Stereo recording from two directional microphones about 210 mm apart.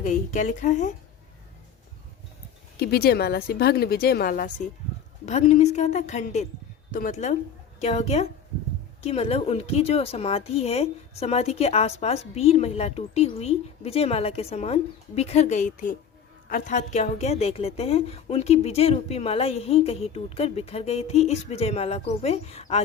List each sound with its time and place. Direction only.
0.0 s a woman's voice: 35° left (ahead or behind)
2.7 s a woman's voice: 50° left (ahead or behind); by 22.8 s 30° left (ahead or behind)